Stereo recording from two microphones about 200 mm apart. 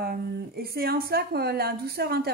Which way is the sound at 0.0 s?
50° right (ahead or behind).